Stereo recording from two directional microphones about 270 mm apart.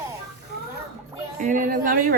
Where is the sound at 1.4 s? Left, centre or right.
Right.